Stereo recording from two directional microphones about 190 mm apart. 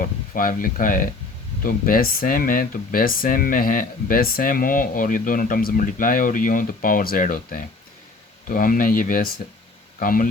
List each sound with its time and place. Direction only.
0.0 s speech: 50° left (ahead or behind)